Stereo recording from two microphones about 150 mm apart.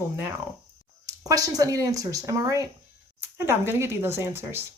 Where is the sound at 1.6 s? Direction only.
20° right (ahead or behind).